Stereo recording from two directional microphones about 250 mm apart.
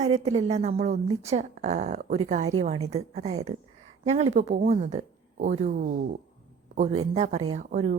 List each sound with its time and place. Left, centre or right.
0.0 s a woman's voice: right